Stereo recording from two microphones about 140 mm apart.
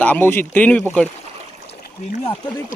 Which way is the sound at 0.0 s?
15° left (ahead or behind).